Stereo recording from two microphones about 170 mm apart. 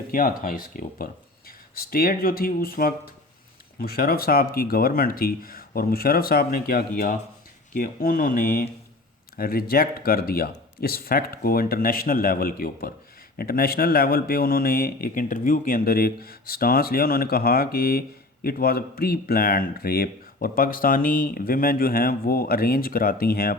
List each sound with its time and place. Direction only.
0.1 s speech: 55° left (ahead or behind)